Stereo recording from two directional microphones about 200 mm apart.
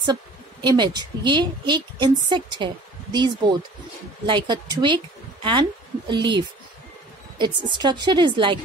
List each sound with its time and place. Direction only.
0.0 s a woman's voice: 20° right (ahead or behind)